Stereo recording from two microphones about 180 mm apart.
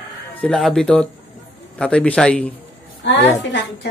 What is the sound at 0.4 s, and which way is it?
Speech, centre (ahead or behind).